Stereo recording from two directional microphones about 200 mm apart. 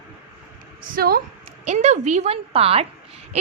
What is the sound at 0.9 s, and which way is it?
Speech, 50° right (ahead or behind).